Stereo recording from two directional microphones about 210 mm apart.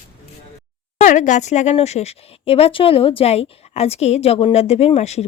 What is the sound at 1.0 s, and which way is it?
A woman's voice, 35° left (ahead or behind).